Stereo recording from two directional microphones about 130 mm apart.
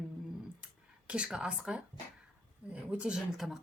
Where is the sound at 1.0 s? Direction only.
10° right (ahead or behind).